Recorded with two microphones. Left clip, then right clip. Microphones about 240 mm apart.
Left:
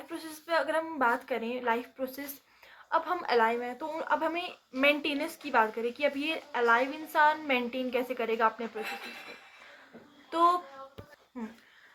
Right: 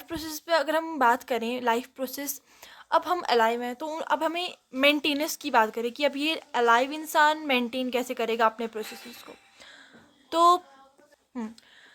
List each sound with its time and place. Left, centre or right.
0.1 s a woman's voice: right
10.2 s a child's voice: right